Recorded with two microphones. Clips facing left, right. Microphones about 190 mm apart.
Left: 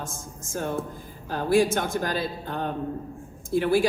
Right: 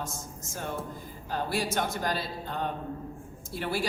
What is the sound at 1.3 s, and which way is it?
Speech, 50° left (ahead or behind).